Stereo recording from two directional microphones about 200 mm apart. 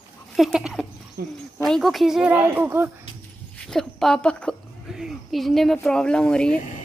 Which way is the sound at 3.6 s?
Centre (ahead or behind).